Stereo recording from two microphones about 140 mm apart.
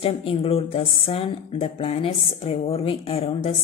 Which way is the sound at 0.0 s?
45° left (ahead or behind).